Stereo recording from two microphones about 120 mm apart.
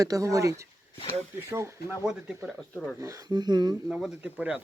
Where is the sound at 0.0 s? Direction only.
30° right (ahead or behind).